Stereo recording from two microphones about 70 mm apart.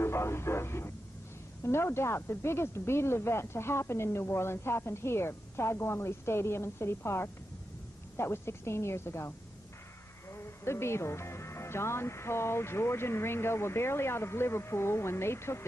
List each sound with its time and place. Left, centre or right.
0.0 s a sound: left
1.6 s speech: left
10.3 s speech: left